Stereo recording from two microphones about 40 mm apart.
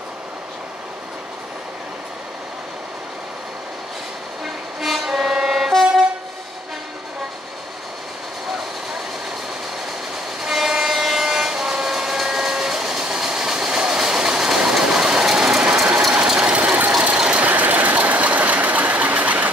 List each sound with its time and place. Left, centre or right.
4.7 s vehicle: centre
5.7 s vehicle: centre
10.4 s train: centre
16.3 s ratchet: right
17.5 s a sound: right